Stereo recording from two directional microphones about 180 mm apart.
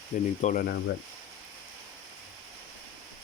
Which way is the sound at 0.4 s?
50° left (ahead or behind).